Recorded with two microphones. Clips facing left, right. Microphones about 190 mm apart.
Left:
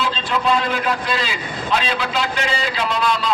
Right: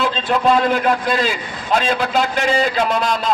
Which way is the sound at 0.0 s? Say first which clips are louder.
Right 4 dB; 50° right (ahead or behind).